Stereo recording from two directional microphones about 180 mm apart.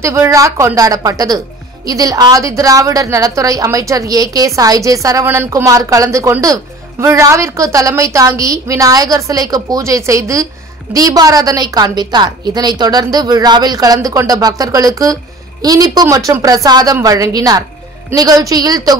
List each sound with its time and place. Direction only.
0.0 s a woman's voice: 15° right (ahead or behind)